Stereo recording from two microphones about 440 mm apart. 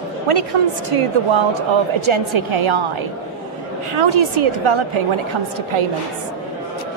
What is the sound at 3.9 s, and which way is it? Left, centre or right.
A woman's voice, right.